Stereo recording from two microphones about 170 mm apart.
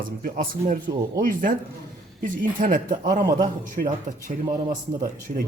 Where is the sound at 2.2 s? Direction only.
50° right (ahead or behind).